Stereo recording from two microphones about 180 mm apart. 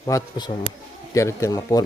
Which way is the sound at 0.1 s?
25° left (ahead or behind).